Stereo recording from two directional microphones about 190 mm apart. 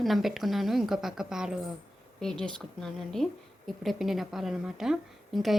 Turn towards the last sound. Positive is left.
turn(degrees=0)  # may be behind; listen again after turning